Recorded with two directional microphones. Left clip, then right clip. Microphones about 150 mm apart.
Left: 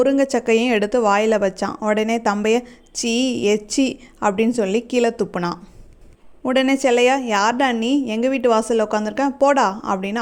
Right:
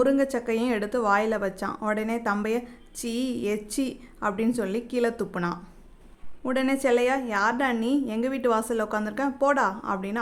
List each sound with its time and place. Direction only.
0.0 s a woman's voice: 35° left (ahead or behind)